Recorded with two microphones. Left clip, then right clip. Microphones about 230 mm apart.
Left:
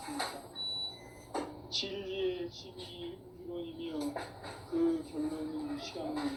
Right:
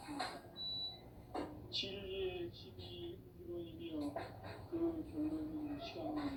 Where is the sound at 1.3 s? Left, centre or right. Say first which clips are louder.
Left 7 dB; left.